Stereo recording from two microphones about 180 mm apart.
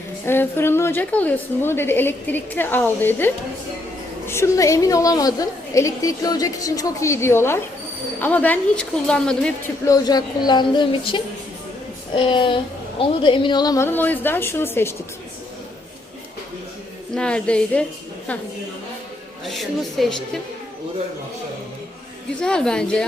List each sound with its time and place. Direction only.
0.3 s a woman's voice: 10° left (ahead or behind)
9.8 s a woman's voice: 20° left (ahead or behind)
17.2 s a woman's voice: 5° left (ahead or behind)
19.5 s a woman's voice: centre (ahead or behind)
22.4 s a woman's voice: 5° left (ahead or behind)